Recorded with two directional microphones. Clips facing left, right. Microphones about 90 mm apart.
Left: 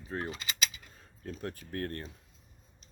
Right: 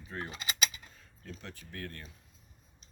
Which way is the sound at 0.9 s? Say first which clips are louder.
Left 5 dB; 40° left (ahead or behind).